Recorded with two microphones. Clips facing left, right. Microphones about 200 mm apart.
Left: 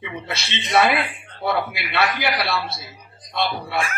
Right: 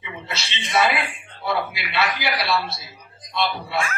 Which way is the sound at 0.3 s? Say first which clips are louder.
Left 3 dB; 55° left (ahead or behind).